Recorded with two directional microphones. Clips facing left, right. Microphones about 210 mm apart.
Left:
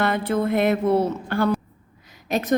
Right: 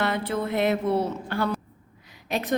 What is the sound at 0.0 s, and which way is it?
A woman's voice, 50° left (ahead or behind).